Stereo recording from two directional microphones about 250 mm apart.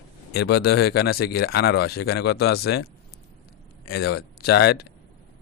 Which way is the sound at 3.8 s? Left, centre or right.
Left.